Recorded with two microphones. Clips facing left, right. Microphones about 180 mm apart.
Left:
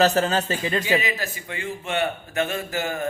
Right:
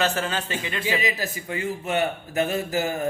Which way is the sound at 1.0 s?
40° right (ahead or behind).